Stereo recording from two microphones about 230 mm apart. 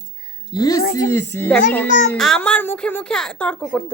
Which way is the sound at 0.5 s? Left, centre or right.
Centre.